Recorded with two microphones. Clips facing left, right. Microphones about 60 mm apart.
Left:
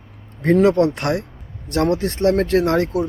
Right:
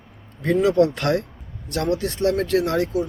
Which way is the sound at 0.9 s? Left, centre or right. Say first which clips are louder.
Even; left.